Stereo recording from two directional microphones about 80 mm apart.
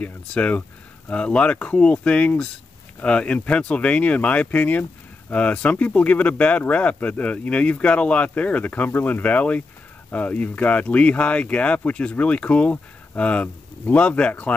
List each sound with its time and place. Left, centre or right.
0.0 s speech: centre